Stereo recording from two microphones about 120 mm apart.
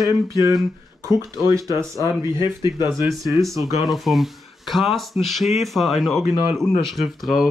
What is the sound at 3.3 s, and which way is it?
Speech, 25° right (ahead or behind).